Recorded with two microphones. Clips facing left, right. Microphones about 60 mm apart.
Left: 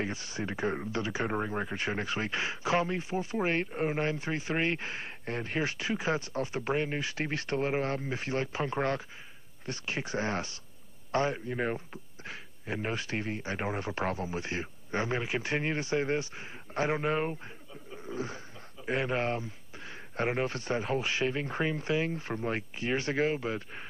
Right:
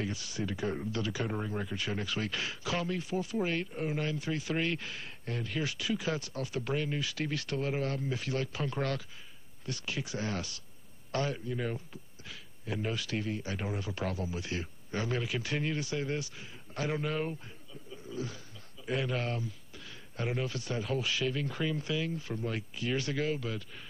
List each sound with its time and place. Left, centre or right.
0.0 s speech: left
17.9 s a sound: left
18.9 s speech: left